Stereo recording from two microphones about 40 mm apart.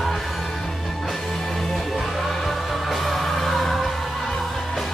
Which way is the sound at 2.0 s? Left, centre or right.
Centre.